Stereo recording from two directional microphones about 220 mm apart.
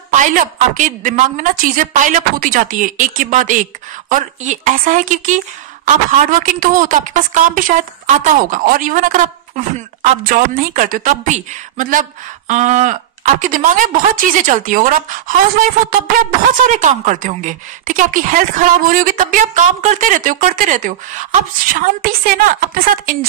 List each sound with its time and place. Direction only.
0.1 s a woman's voice: 35° right (ahead or behind)
16.6 s a woman's voice: 35° right (ahead or behind)